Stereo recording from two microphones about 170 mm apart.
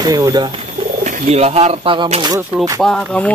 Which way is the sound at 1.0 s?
45° right (ahead or behind).